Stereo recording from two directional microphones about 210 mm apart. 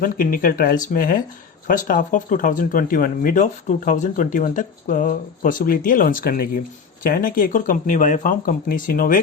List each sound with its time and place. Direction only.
0.0 s speech: 40° left (ahead or behind)